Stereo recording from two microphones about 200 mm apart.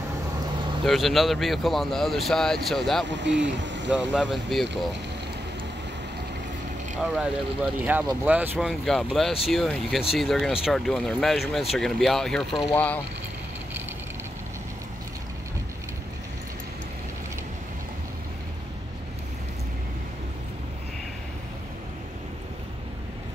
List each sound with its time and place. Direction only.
0.8 s speech: centre (ahead or behind)
3.1 s speech: 60° right (ahead or behind)
3.9 s speech: 5° right (ahead or behind)
7.0 s speech: 5° right (ahead or behind)